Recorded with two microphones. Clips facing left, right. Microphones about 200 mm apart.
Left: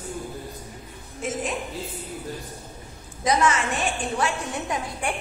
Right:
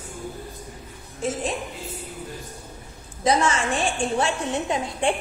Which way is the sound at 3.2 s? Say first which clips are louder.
Right 1 dB; 30° right (ahead or behind).